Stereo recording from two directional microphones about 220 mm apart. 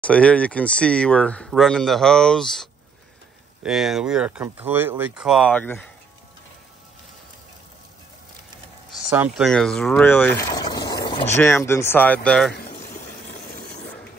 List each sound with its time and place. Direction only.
0.0 s speech: 5° left (ahead or behind)
3.6 s speech: centre (ahead or behind)
9.1 s speech: 10° right (ahead or behind)
9.5 s speech: centre (ahead or behind); by 11.3 s 20° left (ahead or behind)
11.3 s speech: 10° left (ahead or behind)
12.9 s a sound: 30° left (ahead or behind)